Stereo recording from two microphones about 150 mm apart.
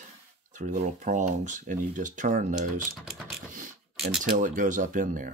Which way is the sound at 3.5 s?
60° right (ahead or behind).